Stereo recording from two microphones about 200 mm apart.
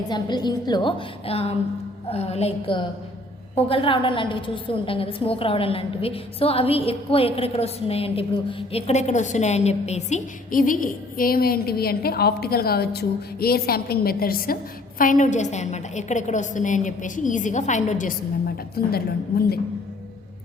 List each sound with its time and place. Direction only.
0.1 s a woman's voice: 20° left (ahead or behind); by 19.5 s 50° left (ahead or behind)